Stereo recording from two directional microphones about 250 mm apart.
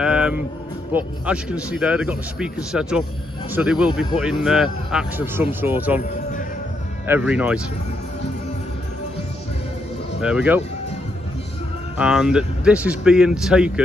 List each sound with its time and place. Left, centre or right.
0.0 s a sound: centre
0.9 s speech: centre
7.1 s speech: centre
10.2 s speech: centre
12.0 s speech: centre